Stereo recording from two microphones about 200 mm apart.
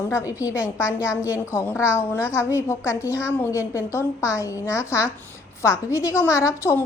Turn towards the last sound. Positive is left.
turn(degrees=15)  # may be behind; listen again after turning